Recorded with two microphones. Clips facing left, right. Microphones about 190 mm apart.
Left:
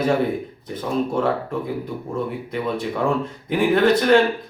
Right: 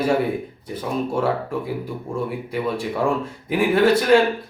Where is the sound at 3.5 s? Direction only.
5° right (ahead or behind).